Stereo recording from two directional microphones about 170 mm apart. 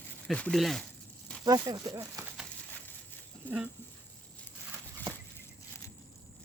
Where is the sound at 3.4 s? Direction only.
10° right (ahead or behind).